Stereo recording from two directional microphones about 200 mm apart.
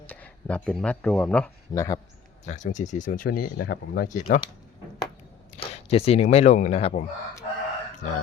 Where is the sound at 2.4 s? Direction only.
35° left (ahead or behind).